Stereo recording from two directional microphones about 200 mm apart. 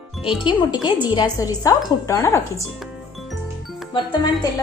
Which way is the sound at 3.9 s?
20° left (ahead or behind).